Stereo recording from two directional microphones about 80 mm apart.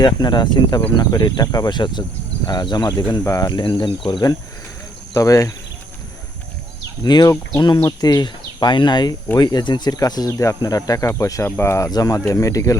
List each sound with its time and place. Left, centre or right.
0.0 s speech: left
1.5 s speech: left
2.5 s speech: left
3.2 s speech: left
3.5 s speech: left
5.1 s speech: left
7.0 s speech: left
10.3 s speech: left
10.6 s speech: left
11.4 s speech: left
11.9 s speech: left